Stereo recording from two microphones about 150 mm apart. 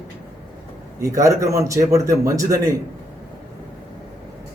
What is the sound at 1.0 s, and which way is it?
A man's voice, 20° right (ahead or behind).